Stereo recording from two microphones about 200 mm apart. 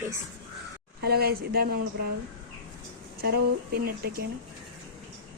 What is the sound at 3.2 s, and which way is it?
Speech, 50° right (ahead or behind).